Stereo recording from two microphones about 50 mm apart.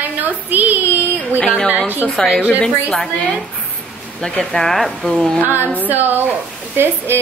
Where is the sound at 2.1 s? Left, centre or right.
Centre.